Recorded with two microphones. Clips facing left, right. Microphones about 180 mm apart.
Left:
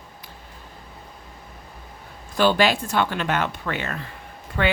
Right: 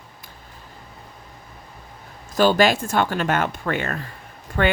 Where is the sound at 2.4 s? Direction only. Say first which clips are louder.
Right 2 dB; 45° right (ahead or behind).